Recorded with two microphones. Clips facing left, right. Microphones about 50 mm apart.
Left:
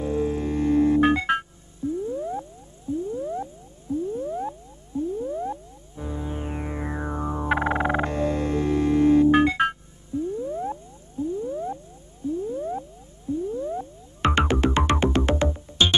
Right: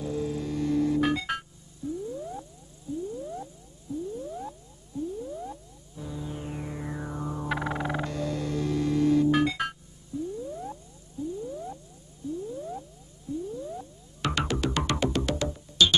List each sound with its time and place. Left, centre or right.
0.0 s music: left
2.0 s a sound: left
13.3 s music: left